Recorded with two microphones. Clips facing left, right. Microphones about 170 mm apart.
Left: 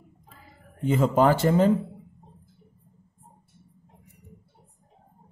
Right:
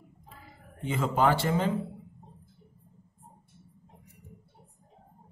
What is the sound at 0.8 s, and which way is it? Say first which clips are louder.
Speech: left 5 dB; 45° left (ahead or behind).